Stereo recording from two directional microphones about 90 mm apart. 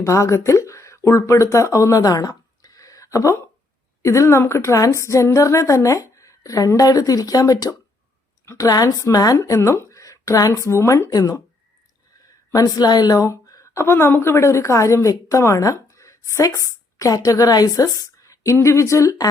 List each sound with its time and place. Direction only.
0.0 s a woman's voice: 35° left (ahead or behind)
12.5 s a woman's voice: 40° left (ahead or behind)